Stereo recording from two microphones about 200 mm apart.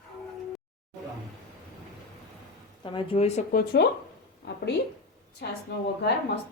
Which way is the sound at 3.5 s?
50° left (ahead or behind).